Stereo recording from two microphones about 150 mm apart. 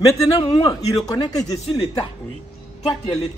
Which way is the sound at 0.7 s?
25° left (ahead or behind).